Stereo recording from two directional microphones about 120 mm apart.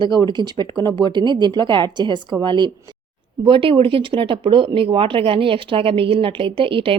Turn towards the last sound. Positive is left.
turn(degrees=-45)  # may be behind; listen again after turning